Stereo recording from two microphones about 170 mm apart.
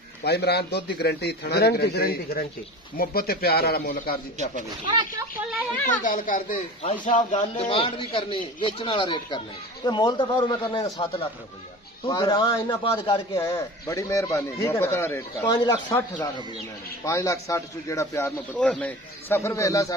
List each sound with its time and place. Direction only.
0.2 s a man's voice: 75° left (ahead or behind); by 4.2 s 60° left (ahead or behind)
6.0 s a man's voice: 50° left (ahead or behind); by 13.4 s 30° left (ahead or behind)
13.4 s speech: 20° left (ahead or behind)